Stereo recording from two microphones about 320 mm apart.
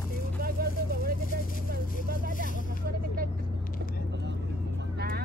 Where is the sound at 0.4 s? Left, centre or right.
Right.